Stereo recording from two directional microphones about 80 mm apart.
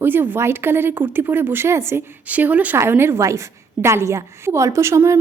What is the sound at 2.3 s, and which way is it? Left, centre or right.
Speech, right.